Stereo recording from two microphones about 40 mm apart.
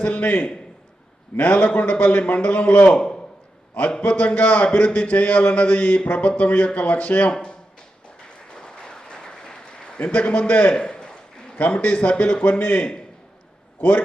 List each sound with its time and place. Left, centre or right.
0.0 s a man's voice: left
3.0 s a sound: centre
4.0 s a man's voice: left
8.5 s applause: centre
10.0 s a man's voice: left
11.5 s a man's voice: left